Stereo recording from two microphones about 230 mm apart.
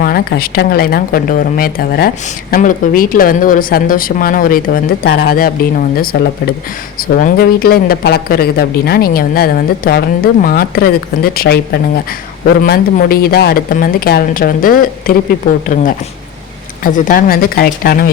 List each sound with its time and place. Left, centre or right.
0.0 s speech: left